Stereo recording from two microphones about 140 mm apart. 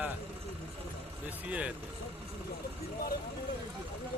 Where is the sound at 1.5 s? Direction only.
10° right (ahead or behind).